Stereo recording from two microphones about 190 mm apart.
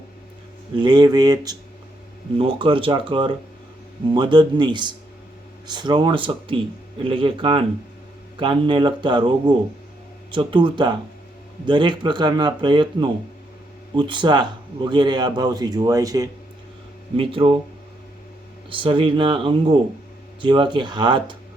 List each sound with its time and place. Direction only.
0.8 s speech: 20° right (ahead or behind)
18.7 s speech: 25° right (ahead or behind)